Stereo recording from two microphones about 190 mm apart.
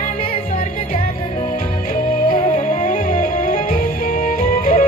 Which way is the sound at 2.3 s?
45° left (ahead or behind).